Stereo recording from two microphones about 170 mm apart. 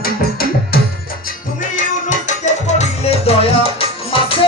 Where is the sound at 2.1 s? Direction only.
45° left (ahead or behind).